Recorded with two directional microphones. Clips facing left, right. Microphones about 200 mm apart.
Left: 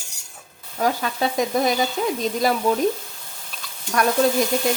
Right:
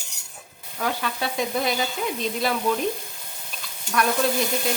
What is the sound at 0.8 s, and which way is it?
Speech, 40° left (ahead or behind).